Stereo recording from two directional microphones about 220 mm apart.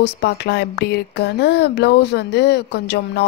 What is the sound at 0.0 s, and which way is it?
Speech, 50° left (ahead or behind).